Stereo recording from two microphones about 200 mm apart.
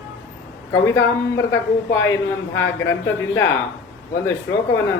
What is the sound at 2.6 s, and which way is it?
Speech, 60° left (ahead or behind).